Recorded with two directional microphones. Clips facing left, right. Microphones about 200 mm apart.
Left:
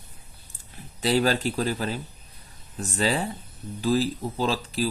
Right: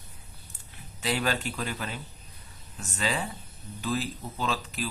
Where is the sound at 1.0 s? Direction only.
35° left (ahead or behind).